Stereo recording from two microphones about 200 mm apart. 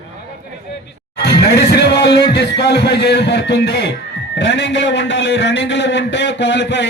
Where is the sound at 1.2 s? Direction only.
55° left (ahead or behind).